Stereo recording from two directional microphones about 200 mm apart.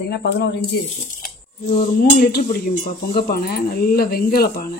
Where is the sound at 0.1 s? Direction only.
55° left (ahead or behind).